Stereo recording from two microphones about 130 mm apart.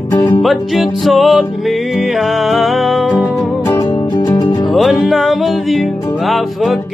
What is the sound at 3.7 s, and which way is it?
Music, 30° left (ahead or behind).